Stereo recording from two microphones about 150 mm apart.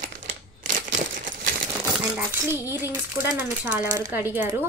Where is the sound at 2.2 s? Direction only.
15° right (ahead or behind).